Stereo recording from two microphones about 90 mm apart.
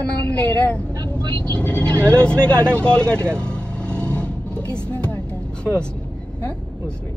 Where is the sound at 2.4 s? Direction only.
10° left (ahead or behind).